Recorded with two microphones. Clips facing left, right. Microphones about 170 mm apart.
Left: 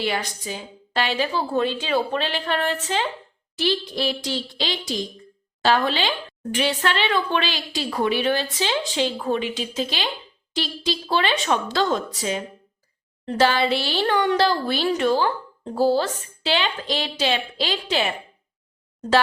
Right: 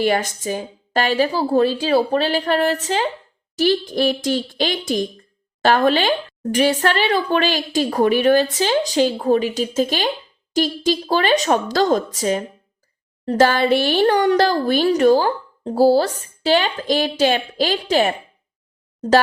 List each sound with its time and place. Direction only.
0.0 s a woman's voice: 45° right (ahead or behind)